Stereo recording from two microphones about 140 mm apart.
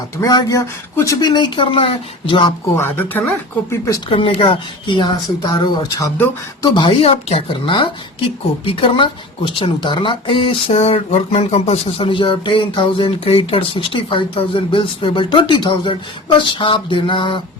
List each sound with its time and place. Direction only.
0.2 s speech: 25° left (ahead or behind)
2.7 s speech: 15° left (ahead or behind)
4.1 s speech: 40° left (ahead or behind)